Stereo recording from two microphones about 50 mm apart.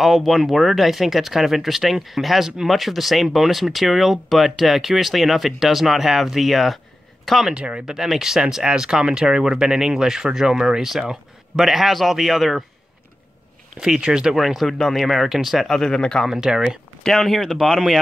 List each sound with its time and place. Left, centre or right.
0.0 s speech: centre
7.5 s speech: right
7.8 s speech: centre
13.7 s speech: centre
14.3 s speech: centre
15.7 s speech: centre
16.3 s speech: centre
17.0 s speech: centre